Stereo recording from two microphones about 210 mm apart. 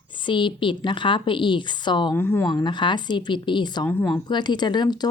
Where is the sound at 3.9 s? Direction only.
10° left (ahead or behind).